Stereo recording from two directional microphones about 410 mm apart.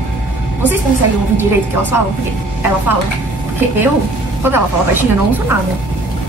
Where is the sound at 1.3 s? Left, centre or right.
Centre.